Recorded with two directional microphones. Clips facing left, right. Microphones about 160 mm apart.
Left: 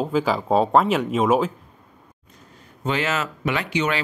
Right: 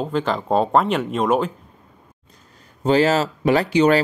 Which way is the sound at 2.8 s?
35° right (ahead or behind).